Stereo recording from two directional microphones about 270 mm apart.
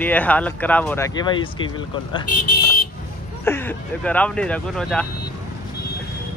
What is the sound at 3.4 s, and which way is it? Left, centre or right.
Speech, centre.